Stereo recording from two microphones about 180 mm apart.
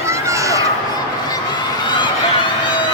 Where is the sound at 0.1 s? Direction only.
15° right (ahead or behind).